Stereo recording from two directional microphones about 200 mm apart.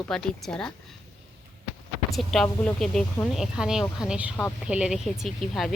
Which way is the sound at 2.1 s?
Centre (ahead or behind).